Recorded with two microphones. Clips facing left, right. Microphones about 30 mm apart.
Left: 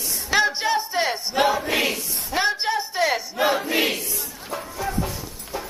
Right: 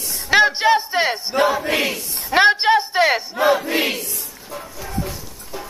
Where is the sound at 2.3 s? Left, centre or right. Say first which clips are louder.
Right 9 dB; right.